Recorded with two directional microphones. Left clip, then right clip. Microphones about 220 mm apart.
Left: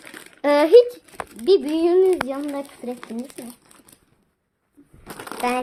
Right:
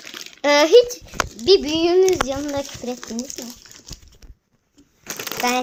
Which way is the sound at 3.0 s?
45° left (ahead or behind).